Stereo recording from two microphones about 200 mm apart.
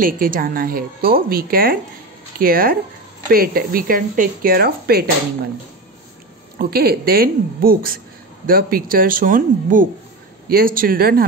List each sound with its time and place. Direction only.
0.0 s speech: 45° right (ahead or behind)
6.6 s speech: 50° right (ahead or behind)